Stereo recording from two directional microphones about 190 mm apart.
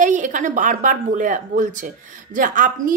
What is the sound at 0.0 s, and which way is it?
Speech, 40° right (ahead or behind).